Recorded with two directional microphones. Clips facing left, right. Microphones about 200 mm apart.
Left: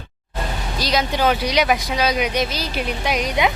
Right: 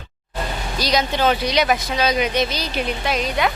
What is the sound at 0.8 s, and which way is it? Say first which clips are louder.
Speech: even; centre (ahead or behind).